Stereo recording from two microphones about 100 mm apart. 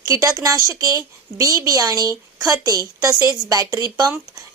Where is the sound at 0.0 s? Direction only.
35° right (ahead or behind).